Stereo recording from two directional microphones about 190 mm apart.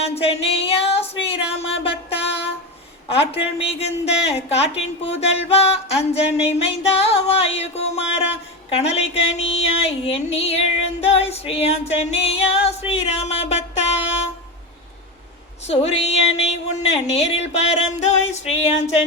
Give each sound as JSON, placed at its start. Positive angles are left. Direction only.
{"t": 0.0, "sound": "a sound", "side_deg": 30}
{"t": 1.5, "sound": "music", "side_deg": 30}
{"t": 3.1, "sound": "a woman's voice", "side_deg": 30}
{"t": 6.9, "sound": "music", "side_deg": 30}
{"t": 8.7, "sound": "a woman's voice", "side_deg": 35}
{"t": 12.9, "sound": "music", "side_deg": 35}
{"t": 15.6, "sound": "a woman's voice", "side_deg": 35}